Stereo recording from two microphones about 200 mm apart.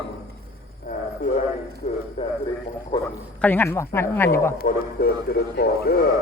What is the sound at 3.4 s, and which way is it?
Speech, 10° left (ahead or behind).